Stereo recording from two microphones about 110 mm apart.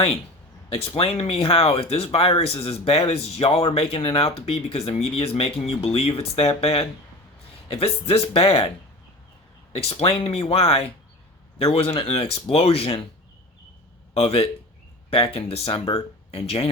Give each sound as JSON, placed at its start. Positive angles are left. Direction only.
{"t": 0.7, "sound": "speech", "side_deg": 60}
{"t": 9.7, "sound": "speech", "side_deg": 60}
{"t": 14.1, "sound": "speech", "side_deg": 60}